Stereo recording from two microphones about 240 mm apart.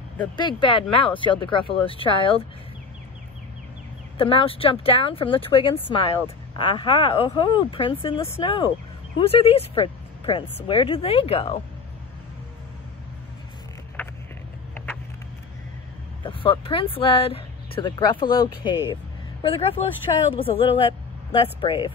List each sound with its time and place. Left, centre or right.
0.4 s speech: centre
4.2 s speech: left
16.2 s speech: left